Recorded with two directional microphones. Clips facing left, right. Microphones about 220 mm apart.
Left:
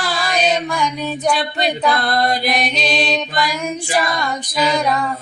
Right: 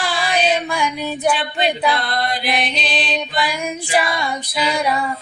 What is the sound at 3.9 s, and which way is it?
Female singing, 10° right (ahead or behind).